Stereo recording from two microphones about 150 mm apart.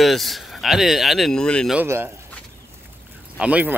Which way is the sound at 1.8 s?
15° right (ahead or behind).